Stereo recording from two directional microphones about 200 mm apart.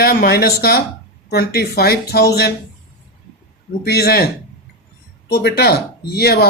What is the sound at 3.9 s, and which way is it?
Speech, 55° left (ahead or behind).